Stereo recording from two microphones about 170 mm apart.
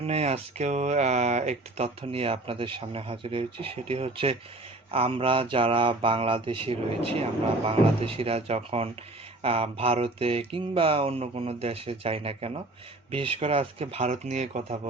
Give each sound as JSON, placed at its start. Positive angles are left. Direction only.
{"t": 0.0, "sound": "speech", "side_deg": -40}